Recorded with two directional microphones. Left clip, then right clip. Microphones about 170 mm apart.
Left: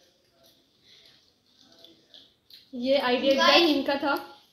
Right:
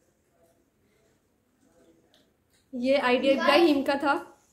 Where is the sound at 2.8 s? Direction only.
15° right (ahead or behind).